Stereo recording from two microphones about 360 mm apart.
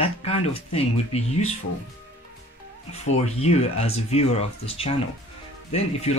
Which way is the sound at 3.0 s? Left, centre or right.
Centre.